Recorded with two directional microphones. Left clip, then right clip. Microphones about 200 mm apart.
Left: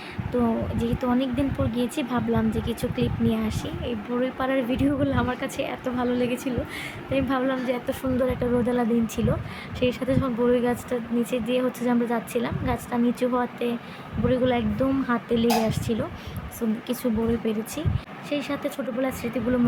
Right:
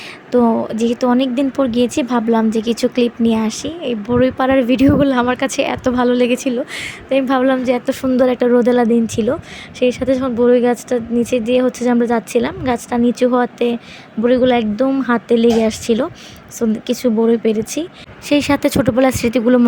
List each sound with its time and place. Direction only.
0.3 s speech: 35° right (ahead or behind)
18.3 s speech: 55° right (ahead or behind)